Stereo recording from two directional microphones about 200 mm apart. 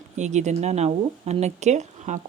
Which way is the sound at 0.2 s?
35° right (ahead or behind).